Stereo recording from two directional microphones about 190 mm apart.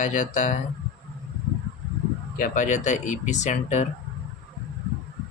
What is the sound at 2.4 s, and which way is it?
Speech, 45° left (ahead or behind).